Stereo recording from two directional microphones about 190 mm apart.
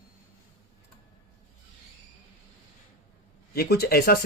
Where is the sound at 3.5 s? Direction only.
60° left (ahead or behind).